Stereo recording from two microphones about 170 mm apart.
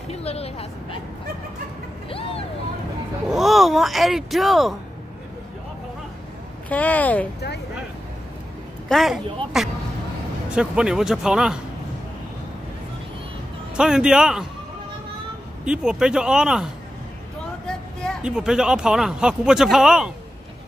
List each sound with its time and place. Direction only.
0.1 s speech: 35° left (ahead or behind)
2.0 s vehicle: 35° left (ahead or behind)
3.3 s speech: centre (ahead or behind)
6.7 s speech: 10° left (ahead or behind)
8.8 s speech: centre (ahead or behind)
13.7 s speech: 5° right (ahead or behind)
15.6 s speech: 5° right (ahead or behind)